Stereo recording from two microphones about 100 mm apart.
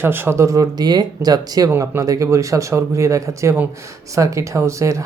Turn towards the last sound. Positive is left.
turn(degrees=-30)  # may be behind; listen again after turning